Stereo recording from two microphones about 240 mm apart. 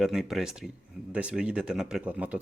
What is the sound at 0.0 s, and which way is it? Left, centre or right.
Speech, centre.